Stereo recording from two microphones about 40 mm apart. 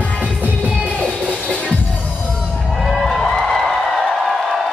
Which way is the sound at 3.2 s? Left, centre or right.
Centre.